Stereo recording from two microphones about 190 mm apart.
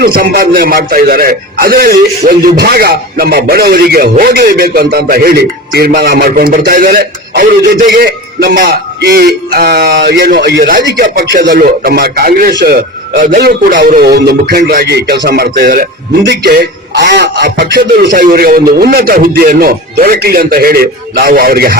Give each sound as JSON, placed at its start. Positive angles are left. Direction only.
{"t": 0.0, "sound": "a man's voice", "side_deg": -50}
{"t": 11.0, "sound": "a man's voice", "side_deg": -45}
{"t": 16.3, "sound": "a man's voice", "side_deg": -60}